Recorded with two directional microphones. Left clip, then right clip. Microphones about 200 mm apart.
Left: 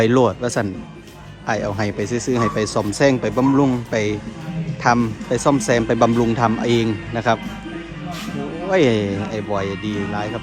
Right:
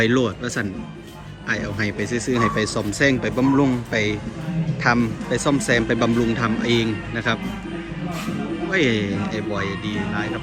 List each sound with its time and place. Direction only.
0.0 s speech: 25° left (ahead or behind)
8.7 s speech: 25° left (ahead or behind)